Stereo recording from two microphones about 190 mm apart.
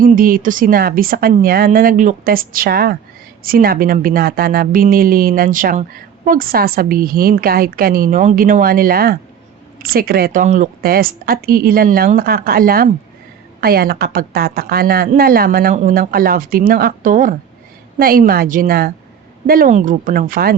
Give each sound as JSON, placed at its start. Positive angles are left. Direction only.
{"t": 0.0, "sound": "a woman's voice", "side_deg": -50}